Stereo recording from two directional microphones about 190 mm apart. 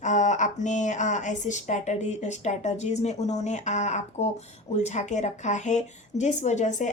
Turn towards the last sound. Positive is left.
turn(degrees=40)  # may be behind; listen again after turning